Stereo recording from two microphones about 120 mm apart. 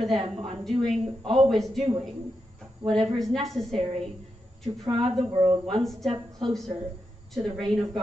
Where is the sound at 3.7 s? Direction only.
50° right (ahead or behind).